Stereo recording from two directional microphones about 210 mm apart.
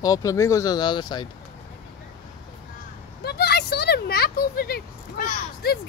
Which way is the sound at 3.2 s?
50° left (ahead or behind).